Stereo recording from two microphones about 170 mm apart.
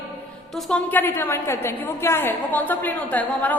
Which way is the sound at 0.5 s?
5° left (ahead or behind).